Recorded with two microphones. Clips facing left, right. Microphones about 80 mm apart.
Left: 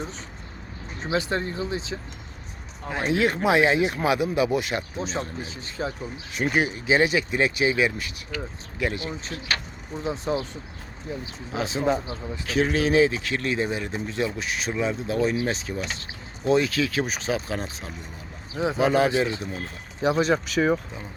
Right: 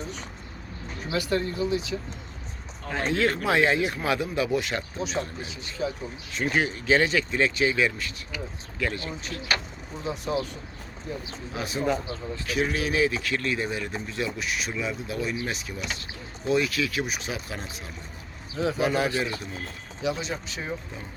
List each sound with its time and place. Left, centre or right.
0.9 s speech: left
2.9 s speech: centre
5.0 s speech: left
6.5 s speech: centre; by 17.9 s left
18.5 s speech: centre
20.0 s speech: left
20.3 s speech: left